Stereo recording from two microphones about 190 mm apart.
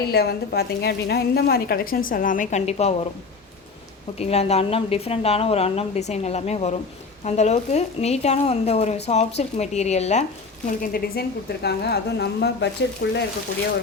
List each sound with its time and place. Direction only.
0.1 s a woman's voice: 55° left (ahead or behind); by 2.9 s 35° left (ahead or behind)
4.2 s a woman's voice: 35° left (ahead or behind)
10.7 s a woman's voice: 55° left (ahead or behind)